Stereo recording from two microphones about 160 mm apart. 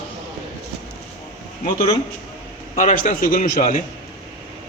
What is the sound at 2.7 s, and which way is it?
A man's voice, 55° left (ahead or behind).